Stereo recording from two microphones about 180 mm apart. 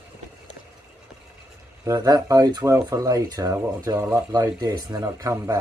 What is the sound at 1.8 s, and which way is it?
Speech, 20° right (ahead or behind).